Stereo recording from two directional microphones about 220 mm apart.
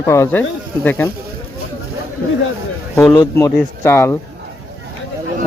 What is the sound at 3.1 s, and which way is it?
Speech, 15° left (ahead or behind).